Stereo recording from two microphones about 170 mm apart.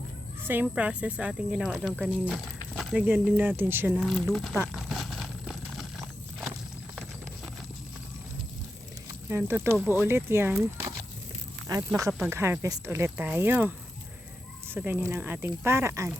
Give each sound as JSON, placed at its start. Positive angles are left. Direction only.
{"t": 0.4, "sound": "speech", "side_deg": -10}
{"t": 3.9, "sound": "a sound", "side_deg": 0}
{"t": 9.3, "sound": "speech", "side_deg": -15}